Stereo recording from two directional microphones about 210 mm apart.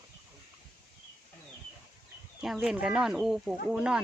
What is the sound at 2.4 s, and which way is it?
Speech, 5° right (ahead or behind).